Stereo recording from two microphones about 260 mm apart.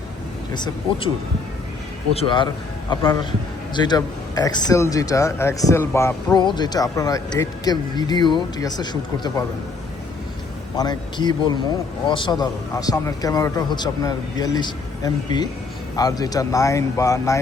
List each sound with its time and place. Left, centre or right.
2.1 s speech: centre
10.8 s speech: centre